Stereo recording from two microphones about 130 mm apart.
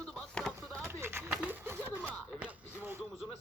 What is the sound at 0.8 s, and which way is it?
Speech, 20° right (ahead or behind).